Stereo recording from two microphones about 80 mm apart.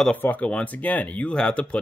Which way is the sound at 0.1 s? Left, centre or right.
Centre.